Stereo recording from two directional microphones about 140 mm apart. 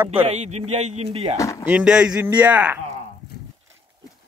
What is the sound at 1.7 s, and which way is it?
Speech, 10° right (ahead or behind).